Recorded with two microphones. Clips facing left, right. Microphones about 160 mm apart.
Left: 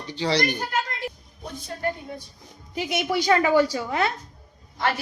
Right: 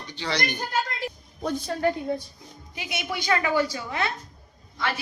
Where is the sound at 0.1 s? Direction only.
35° left (ahead or behind).